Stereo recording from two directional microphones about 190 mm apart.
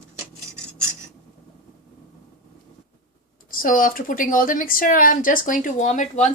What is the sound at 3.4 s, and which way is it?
Speech, 45° left (ahead or behind).